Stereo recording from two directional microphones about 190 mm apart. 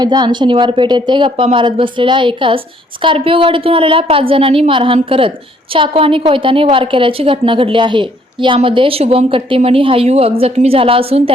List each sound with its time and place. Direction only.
0.0 s a woman's voice: 20° right (ahead or behind)